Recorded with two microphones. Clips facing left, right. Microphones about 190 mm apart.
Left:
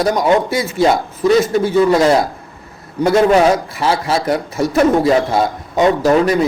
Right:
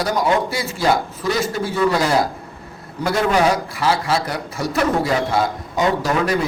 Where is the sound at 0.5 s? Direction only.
20° left (ahead or behind).